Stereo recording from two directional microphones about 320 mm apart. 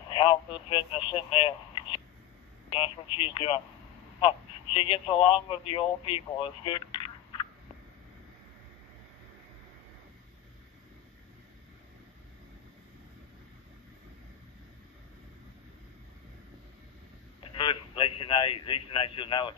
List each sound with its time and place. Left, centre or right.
0.1 s speech: centre
4.7 s speech: centre
17.4 s radio: centre